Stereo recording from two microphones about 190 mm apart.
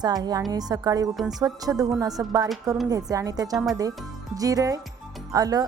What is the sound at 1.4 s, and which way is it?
A woman's voice, 20° right (ahead or behind).